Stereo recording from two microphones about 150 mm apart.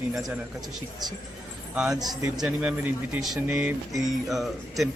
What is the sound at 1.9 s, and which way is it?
Speech, 25° right (ahead or behind).